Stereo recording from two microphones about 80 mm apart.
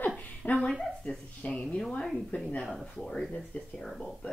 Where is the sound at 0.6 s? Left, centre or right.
Centre.